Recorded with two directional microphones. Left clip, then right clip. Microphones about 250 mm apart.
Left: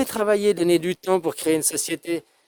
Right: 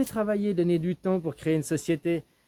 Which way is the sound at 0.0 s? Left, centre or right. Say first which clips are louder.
Left 8 dB; left.